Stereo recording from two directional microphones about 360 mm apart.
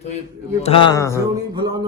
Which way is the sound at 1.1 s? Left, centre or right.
Centre.